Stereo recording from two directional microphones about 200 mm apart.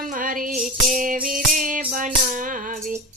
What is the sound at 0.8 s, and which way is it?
Music, 40° right (ahead or behind).